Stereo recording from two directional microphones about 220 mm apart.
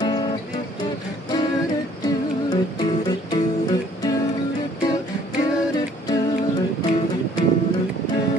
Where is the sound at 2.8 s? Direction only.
20° left (ahead or behind).